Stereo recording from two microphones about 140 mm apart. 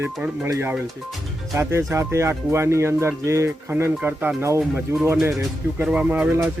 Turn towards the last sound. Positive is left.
turn(degrees=-15)  # may be behind; listen again after turning